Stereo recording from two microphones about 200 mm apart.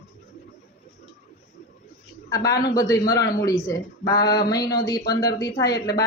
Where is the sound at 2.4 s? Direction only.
20° left (ahead or behind).